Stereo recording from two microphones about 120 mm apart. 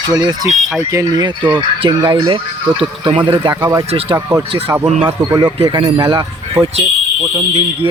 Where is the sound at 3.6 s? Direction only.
30° right (ahead or behind).